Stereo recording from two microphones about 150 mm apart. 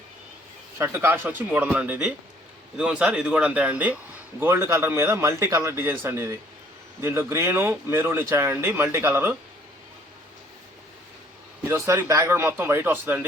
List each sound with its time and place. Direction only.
0.8 s speech: 15° right (ahead or behind)
11.7 s speech: 20° right (ahead or behind)